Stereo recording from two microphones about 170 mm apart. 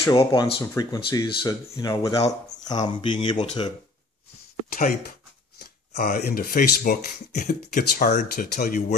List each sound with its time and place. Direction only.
0.0 s speech: 15° left (ahead or behind)
4.6 s speech: 55° left (ahead or behind)
5.6 s shuffling cards: 70° left (ahead or behind)
6.2 s speech: 60° left (ahead or behind)